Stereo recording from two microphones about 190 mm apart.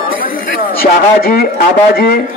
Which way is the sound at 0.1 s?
50° left (ahead or behind).